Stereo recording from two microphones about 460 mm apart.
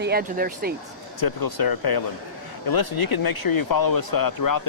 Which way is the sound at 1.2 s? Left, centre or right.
Left.